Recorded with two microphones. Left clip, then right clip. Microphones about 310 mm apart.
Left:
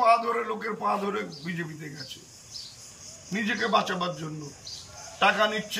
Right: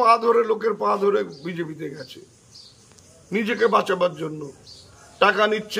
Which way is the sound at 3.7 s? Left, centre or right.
Centre.